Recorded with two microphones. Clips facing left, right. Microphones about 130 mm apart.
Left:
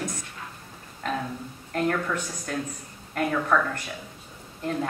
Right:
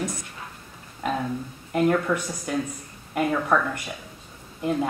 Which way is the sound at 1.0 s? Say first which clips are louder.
Right 3 dB; 10° right (ahead or behind).